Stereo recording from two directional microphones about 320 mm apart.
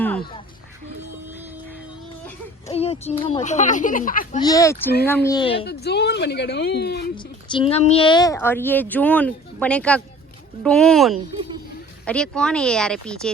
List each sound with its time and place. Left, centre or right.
2.6 s speech: centre
4.4 s speech: centre
5.6 s speech: left
7.4 s speech: centre